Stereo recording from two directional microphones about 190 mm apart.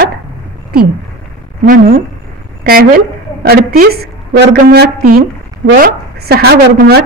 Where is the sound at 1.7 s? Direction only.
45° right (ahead or behind).